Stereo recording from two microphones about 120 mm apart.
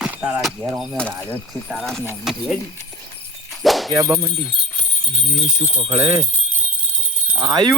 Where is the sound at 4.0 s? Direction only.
20° right (ahead or behind).